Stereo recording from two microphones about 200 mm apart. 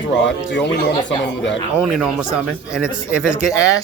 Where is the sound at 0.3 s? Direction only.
60° left (ahead or behind).